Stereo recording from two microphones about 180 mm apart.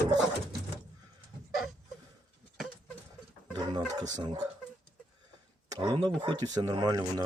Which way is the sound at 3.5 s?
25° right (ahead or behind).